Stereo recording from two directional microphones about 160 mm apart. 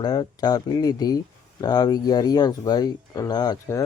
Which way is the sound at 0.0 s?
25° left (ahead or behind).